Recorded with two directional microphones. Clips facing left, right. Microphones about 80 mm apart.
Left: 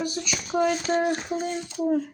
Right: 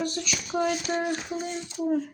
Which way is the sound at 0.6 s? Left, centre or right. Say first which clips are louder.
Left 4 dB; left.